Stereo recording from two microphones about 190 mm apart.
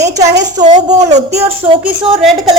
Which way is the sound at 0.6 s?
40° right (ahead or behind).